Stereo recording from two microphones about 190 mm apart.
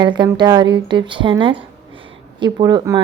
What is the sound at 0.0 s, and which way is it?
A woman's voice, 25° right (ahead or behind).